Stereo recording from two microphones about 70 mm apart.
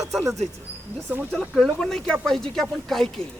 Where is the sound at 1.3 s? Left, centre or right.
Centre.